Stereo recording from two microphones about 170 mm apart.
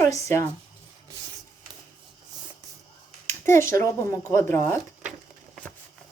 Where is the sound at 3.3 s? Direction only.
15° left (ahead or behind).